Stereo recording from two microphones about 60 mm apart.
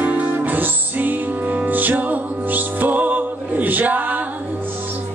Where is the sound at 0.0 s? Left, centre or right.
Right.